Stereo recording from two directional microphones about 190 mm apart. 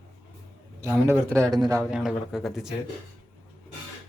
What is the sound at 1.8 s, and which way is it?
Speech, centre (ahead or behind).